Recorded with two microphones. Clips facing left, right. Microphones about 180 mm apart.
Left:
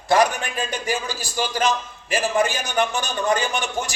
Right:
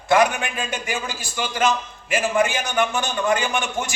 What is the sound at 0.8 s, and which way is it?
A man's voice, 40° left (ahead or behind).